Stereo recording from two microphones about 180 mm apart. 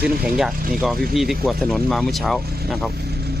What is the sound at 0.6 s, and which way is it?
Speech, 50° right (ahead or behind).